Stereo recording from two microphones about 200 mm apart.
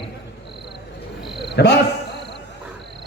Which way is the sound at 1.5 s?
55° left (ahead or behind).